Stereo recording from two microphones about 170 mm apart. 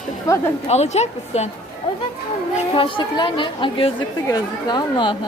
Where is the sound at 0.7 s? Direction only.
40° left (ahead or behind).